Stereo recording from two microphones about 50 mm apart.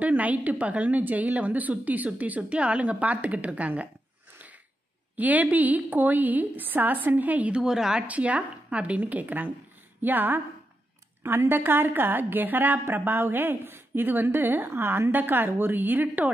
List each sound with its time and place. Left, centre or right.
0.0 s a woman's voice: right
5.1 s a woman's voice: right
7.6 s speech: centre
8.1 s a woman's voice: right
11.2 s a woman's voice: right
15.0 s a woman's voice: right